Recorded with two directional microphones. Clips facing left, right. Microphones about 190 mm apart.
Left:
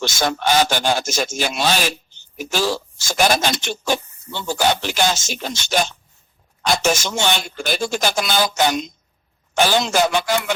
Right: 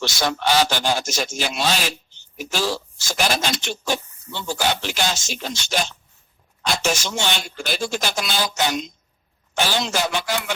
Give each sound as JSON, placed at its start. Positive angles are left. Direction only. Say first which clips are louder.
{"t": 0.0, "sound": "speech", "louder": "left 2 dB", "side_deg": 50}
{"t": 6.6, "sound": "speech", "louder": "left 4 dB", "side_deg": 50}